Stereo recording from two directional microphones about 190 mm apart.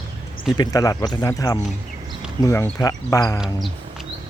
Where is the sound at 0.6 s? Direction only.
20° left (ahead or behind).